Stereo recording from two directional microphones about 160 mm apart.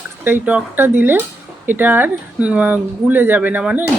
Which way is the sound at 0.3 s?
10° right (ahead or behind).